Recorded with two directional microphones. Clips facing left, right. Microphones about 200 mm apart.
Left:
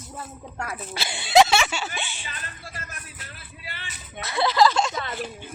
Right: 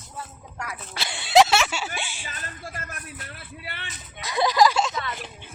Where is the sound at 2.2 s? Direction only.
45° right (ahead or behind).